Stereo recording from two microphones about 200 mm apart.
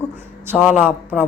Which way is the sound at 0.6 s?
10° right (ahead or behind).